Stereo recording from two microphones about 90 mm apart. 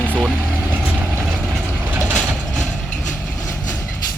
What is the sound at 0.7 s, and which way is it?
Vehicle, 20° right (ahead or behind).